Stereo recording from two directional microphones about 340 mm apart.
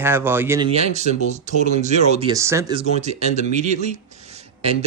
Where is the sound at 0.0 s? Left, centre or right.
Centre.